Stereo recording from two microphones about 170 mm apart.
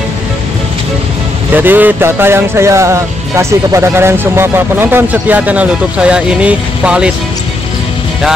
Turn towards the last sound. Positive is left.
turn(degrees=-5)  # may be behind; listen again after turning